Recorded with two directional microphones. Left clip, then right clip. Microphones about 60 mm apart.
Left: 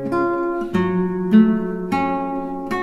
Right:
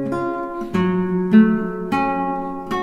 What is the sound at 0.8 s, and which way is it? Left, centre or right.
Guitar, centre.